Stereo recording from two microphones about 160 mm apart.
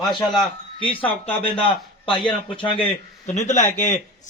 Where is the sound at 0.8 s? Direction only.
35° left (ahead or behind).